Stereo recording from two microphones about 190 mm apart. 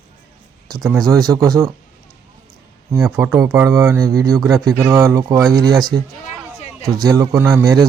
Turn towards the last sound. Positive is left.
turn(degrees=-15)  # may be behind; listen again after turning